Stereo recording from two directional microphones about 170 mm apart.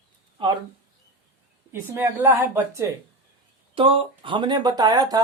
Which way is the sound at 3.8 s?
30° right (ahead or behind).